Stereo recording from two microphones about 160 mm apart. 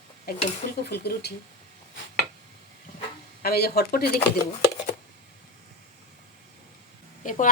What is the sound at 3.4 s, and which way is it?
Speech, 75° left (ahead or behind).